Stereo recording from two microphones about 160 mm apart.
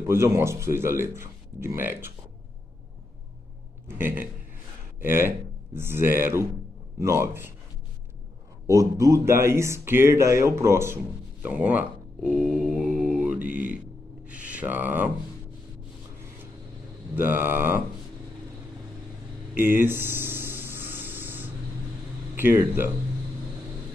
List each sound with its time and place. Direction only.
0.0 s speech: 15° right (ahead or behind)
3.8 s a man's voice: 15° right (ahead or behind)
8.6 s speech: 20° right (ahead or behind)
14.2 s a sound: 10° right (ahead or behind)
17.1 s speech: 15° right (ahead or behind)
19.5 s a sound: 15° right (ahead or behind)
22.3 s speech: 10° right (ahead or behind)